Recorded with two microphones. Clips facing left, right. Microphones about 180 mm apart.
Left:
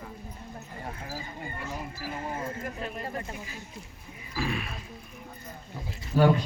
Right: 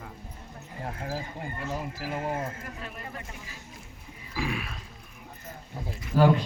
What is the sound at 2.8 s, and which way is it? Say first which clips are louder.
Speech: left 5 dB; 35° left (ahead or behind).